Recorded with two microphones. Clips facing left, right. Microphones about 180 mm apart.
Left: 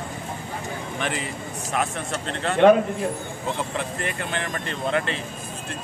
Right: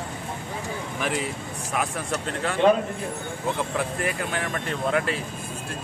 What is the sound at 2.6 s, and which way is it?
Speech, 65° left (ahead or behind).